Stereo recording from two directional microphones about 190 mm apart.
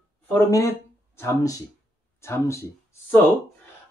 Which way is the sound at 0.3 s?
15° left (ahead or behind).